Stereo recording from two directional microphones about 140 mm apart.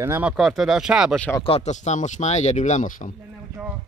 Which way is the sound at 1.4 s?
50° left (ahead or behind).